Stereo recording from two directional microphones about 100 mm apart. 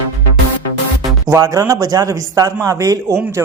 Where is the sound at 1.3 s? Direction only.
35° right (ahead or behind).